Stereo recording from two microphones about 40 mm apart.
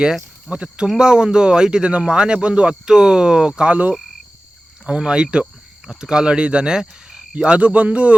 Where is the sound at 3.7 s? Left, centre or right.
Right.